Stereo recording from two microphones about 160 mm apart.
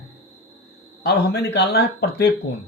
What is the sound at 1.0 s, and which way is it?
Speech, 90° left.